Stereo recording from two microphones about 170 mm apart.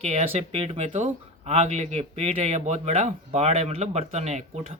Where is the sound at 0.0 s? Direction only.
40° right (ahead or behind).